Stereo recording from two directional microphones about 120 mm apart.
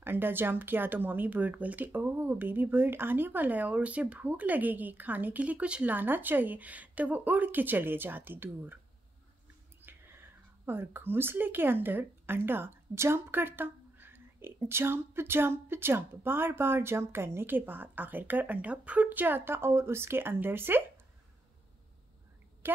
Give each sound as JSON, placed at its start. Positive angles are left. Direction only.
{"t": 0.0, "sound": "speech", "side_deg": -15}
{"t": 9.8, "sound": "whispering", "side_deg": -20}
{"t": 10.6, "sound": "speech", "side_deg": -20}